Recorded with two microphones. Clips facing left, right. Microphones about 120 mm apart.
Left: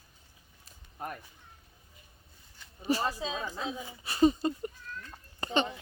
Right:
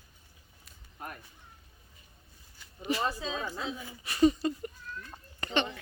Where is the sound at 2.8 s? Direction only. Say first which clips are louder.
Left 2 dB; 35° left (ahead or behind).